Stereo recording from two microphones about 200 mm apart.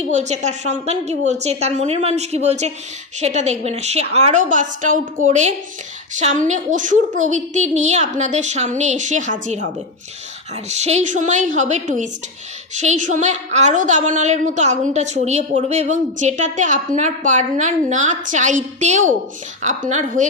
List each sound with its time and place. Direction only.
0.1 s a woman's voice: 35° right (ahead or behind)
10.7 s a woman's voice: 35° right (ahead or behind)